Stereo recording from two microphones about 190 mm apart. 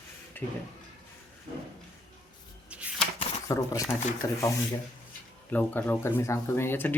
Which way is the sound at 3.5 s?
15° left (ahead or behind).